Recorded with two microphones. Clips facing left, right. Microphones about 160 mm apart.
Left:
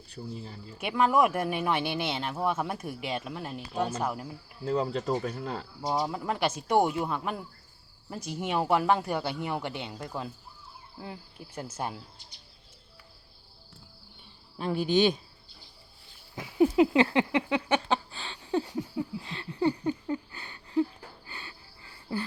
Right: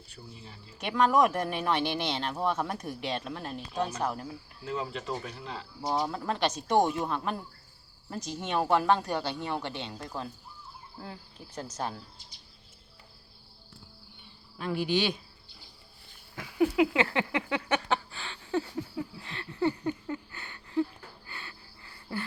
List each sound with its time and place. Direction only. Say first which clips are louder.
0.2 s speech: left 9 dB; 25° left (ahead or behind)
0.8 s speech: even; 5° left (ahead or behind)
4.6 s speech: left 6 dB; 40° left (ahead or behind)
5.8 s speech: even; 15° left (ahead or behind)
11.0 s speech: left 3 dB; 10° left (ahead or behind)
16.3 s a sound: left 3 dB; 20° left (ahead or behind)
21.2 s cricket: even; 20° left (ahead or behind)